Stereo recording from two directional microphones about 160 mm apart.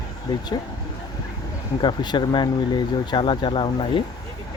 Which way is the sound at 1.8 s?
25° left (ahead or behind).